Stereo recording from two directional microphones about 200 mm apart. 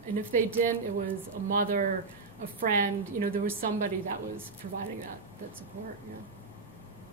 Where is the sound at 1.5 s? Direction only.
40° right (ahead or behind).